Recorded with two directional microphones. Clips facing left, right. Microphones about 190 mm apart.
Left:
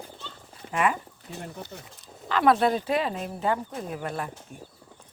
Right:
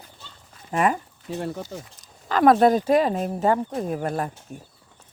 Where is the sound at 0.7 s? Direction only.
40° right (ahead or behind).